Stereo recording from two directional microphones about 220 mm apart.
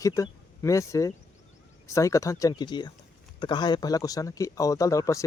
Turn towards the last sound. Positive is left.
turn(degrees=15)  # may be behind; listen again after turning